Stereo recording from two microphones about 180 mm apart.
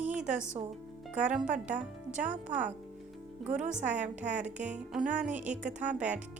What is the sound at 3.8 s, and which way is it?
Music, 40° right (ahead or behind).